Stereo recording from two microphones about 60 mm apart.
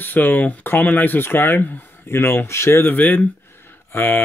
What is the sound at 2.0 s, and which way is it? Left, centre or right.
Speech, left.